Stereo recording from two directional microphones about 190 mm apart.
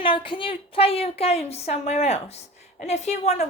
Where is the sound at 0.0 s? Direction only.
25° left (ahead or behind).